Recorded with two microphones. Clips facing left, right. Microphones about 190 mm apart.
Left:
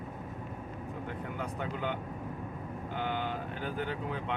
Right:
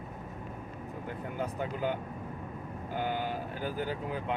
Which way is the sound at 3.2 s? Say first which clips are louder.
Right 1 dB; 5° right (ahead or behind).